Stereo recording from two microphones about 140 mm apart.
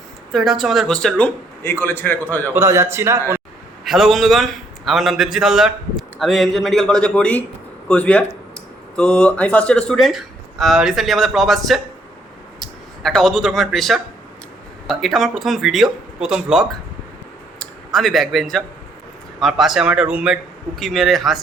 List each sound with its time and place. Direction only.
0.3 s speech: centre (ahead or behind); by 2.1 s 15° left (ahead or behind)
2.5 s a man's voice: 20° right (ahead or behind)
3.8 s speech: centre (ahead or behind)